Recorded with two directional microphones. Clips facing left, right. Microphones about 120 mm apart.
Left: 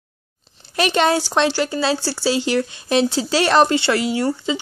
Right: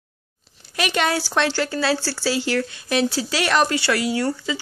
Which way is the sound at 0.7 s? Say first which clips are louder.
Left 5 dB; 30° left (ahead or behind).